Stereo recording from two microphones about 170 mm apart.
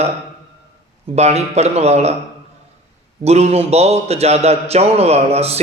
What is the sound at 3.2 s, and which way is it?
A man's voice, 40° right (ahead or behind).